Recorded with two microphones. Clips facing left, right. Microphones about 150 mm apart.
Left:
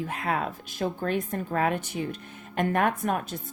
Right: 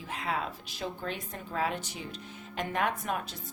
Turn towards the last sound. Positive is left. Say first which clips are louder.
# left 6 dB
turn(degrees=50)  # may be behind; listen again after turning